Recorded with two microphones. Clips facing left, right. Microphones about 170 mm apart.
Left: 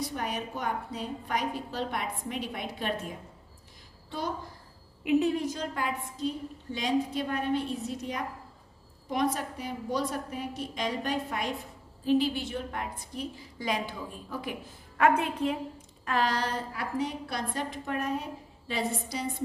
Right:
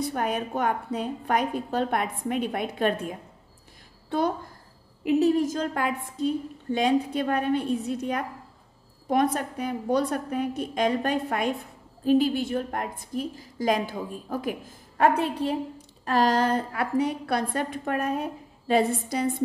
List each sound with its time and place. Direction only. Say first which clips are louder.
0.0 s a woman's voice: right 6 dB; 55° right (ahead or behind)
5.0 s a woman's voice: right 4 dB; 40° right (ahead or behind); by 19.2 s 55° right (ahead or behind)